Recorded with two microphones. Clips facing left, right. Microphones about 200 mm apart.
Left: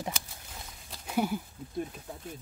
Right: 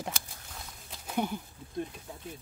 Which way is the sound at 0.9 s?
5° left (ahead or behind).